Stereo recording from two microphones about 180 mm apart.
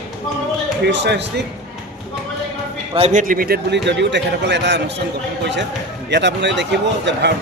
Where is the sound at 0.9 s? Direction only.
75° right (ahead or behind).